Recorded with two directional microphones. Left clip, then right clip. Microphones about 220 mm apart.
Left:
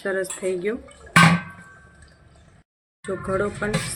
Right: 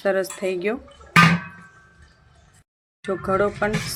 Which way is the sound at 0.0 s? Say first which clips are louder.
Right 3 dB; 45° right (ahead or behind).